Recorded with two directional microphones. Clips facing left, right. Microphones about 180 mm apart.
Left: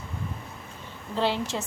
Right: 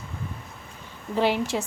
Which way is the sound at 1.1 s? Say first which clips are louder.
Right 3 dB; 15° right (ahead or behind).